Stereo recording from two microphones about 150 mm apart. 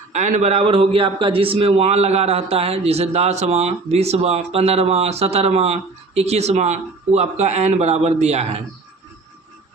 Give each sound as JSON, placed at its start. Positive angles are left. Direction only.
{"t": 0.1, "sound": "a man's voice", "side_deg": -55}